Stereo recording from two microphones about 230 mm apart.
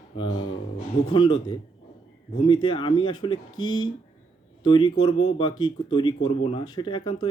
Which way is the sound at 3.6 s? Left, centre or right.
Left.